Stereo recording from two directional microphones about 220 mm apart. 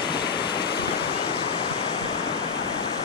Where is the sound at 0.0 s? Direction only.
20° left (ahead or behind).